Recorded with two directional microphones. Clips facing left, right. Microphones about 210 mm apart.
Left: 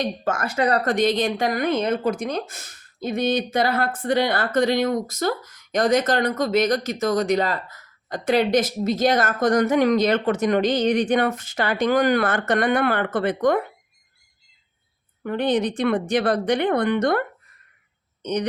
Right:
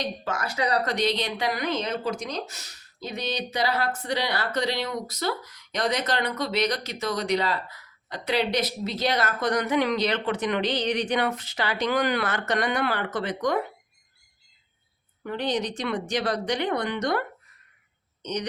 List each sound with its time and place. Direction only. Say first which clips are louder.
0.0 s speech: left 5 dB; 50° left (ahead or behind)
15.2 s a woman's voice: left 6 dB; 55° left (ahead or behind)